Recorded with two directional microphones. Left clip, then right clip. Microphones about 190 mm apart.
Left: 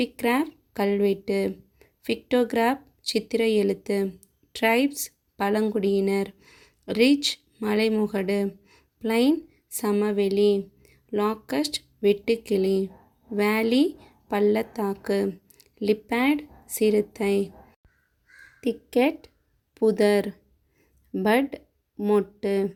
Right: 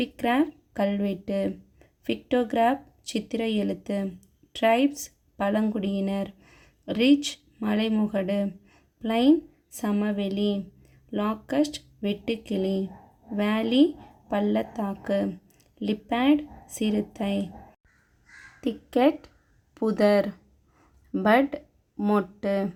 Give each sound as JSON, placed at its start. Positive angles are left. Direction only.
{"t": 0.0, "sound": "a woman's voice", "side_deg": 10}
{"t": 18.6, "sound": "speech", "side_deg": 25}